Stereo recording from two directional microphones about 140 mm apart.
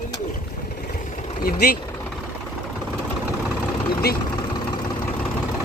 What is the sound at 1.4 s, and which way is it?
Speech, 90° left.